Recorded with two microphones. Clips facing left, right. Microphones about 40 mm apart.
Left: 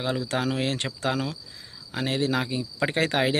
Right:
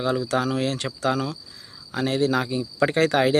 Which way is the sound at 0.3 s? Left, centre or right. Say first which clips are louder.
Right 3 dB; left.